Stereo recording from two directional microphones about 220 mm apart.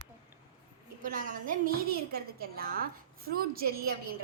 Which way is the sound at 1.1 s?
40° right (ahead or behind).